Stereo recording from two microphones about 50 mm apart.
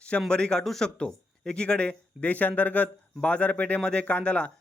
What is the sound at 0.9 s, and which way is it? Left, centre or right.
A man's voice, centre.